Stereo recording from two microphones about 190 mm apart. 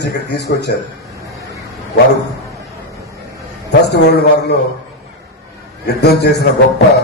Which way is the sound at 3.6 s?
60° left (ahead or behind).